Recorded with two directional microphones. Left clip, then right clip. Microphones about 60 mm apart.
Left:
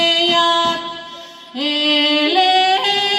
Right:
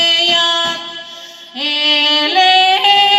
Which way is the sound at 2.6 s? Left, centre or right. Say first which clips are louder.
Right 5 dB; left.